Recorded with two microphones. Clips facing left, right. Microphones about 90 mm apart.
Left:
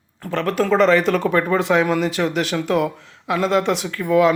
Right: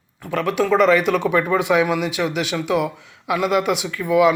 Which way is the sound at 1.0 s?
5° right (ahead or behind).